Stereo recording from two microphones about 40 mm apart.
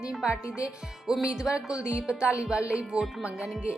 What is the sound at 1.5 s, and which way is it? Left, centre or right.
A woman's voice, right.